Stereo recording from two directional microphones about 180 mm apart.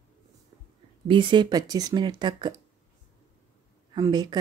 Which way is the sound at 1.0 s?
25° right (ahead or behind).